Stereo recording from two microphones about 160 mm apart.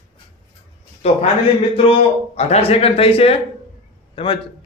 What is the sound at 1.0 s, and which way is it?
Speech, 40° left (ahead or behind).